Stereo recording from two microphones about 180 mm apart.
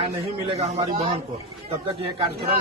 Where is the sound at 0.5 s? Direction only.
35° right (ahead or behind).